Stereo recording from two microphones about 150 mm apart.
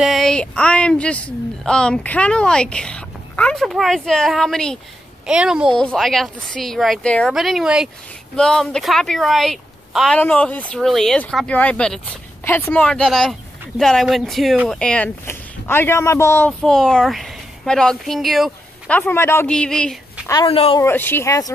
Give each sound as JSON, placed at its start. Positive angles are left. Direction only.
{"t": 0.0, "sound": "a woman's voice", "side_deg": 0}
{"t": 12.4, "sound": "a woman's voice", "side_deg": 15}
{"t": 19.5, "sound": "a woman's voice", "side_deg": 5}
{"t": 20.4, "sound": "speech", "side_deg": 35}
{"t": 20.8, "sound": "speech", "side_deg": 15}